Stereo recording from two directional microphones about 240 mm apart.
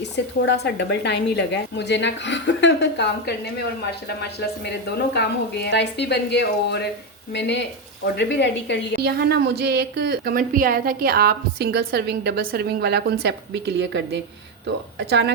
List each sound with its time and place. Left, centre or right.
0.4 s a woman's voice: left
5.1 s a woman's voice: left
9.0 s a woman's voice: right